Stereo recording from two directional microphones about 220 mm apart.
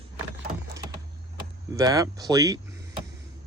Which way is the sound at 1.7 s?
15° right (ahead or behind).